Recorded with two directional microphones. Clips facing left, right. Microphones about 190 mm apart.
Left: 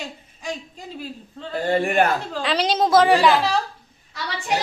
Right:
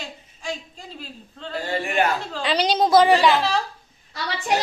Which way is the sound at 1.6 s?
50° left (ahead or behind).